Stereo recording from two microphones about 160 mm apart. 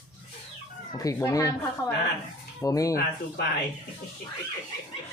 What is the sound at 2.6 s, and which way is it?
Speech, 20° left (ahead or behind).